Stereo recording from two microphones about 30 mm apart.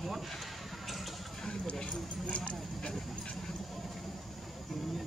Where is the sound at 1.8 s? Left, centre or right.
Left.